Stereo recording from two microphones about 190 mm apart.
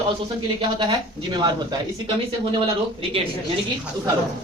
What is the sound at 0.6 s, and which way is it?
Speech, 25° right (ahead or behind).